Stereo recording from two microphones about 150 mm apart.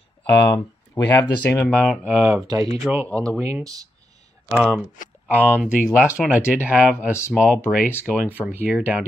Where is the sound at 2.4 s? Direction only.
25° right (ahead or behind).